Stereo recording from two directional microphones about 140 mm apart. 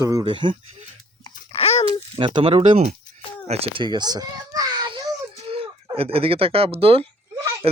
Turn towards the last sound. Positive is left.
turn(degrees=-45)  # may be behind; listen again after turning